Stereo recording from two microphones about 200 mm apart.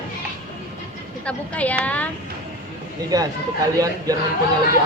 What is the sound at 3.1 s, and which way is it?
Speech, 20° right (ahead or behind).